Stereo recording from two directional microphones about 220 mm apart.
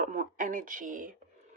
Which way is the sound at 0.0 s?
35° right (ahead or behind).